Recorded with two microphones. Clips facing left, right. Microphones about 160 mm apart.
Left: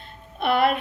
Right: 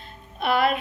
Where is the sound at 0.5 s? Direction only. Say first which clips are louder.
Left 1 dB; 50° left (ahead or behind).